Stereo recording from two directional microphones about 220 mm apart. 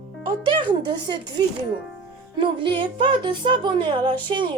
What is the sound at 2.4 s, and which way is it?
A woman's voice, 25° right (ahead or behind).